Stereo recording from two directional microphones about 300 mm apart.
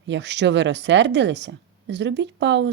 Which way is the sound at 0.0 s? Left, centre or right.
Right.